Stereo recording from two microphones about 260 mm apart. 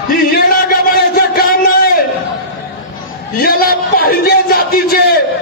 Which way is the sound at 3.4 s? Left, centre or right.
Left.